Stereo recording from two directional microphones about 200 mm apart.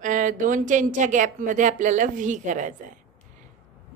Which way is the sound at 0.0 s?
40° right (ahead or behind).